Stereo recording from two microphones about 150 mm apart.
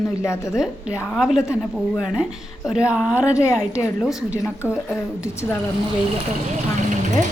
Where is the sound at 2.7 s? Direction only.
5° right (ahead or behind).